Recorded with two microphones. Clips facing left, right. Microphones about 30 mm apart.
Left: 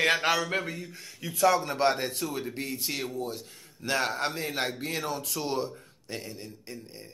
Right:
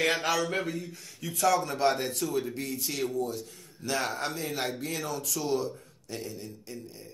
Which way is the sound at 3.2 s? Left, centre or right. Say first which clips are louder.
Right 2 dB; left.